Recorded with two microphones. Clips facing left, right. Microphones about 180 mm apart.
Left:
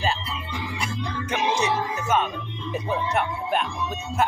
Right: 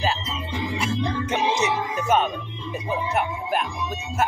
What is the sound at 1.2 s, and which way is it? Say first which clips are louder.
Music: left 2 dB; 20° right (ahead or behind).